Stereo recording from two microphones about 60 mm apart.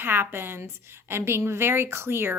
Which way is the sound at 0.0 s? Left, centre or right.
Right.